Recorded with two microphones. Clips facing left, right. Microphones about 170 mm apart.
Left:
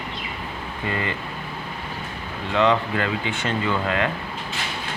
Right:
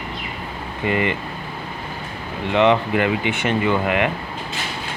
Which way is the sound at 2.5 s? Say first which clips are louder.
Right 4 dB; 20° right (ahead or behind).